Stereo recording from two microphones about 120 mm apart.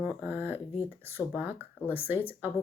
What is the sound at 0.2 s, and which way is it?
Speech, 15° right (ahead or behind).